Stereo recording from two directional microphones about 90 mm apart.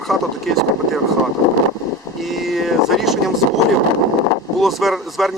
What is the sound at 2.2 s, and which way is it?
Speech, centre (ahead or behind).